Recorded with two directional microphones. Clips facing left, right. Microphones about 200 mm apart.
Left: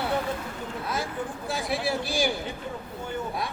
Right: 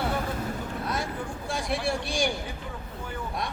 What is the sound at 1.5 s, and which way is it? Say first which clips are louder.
Speech: even; centre (ahead or behind).